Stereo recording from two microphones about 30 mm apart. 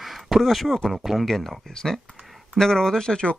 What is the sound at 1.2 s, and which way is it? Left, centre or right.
Speech, centre.